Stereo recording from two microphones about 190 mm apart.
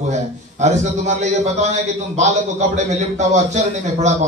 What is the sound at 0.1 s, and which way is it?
A man's voice, 40° right (ahead or behind).